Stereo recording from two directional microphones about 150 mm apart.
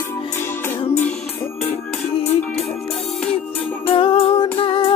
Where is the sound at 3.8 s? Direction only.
40° left (ahead or behind).